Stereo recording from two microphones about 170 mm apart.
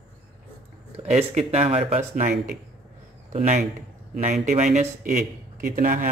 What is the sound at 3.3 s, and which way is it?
Speech, 45° right (ahead or behind).